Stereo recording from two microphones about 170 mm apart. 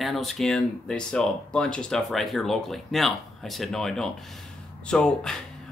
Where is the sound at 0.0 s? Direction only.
Centre (ahead or behind).